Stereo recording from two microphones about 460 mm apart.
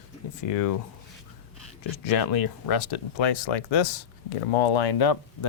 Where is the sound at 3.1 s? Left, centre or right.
Left.